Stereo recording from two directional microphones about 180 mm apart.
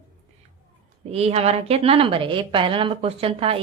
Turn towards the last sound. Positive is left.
turn(degrees=-30)  # may be behind; listen again after turning